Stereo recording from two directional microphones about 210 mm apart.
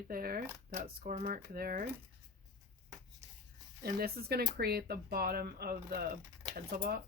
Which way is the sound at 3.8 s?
45° right (ahead or behind).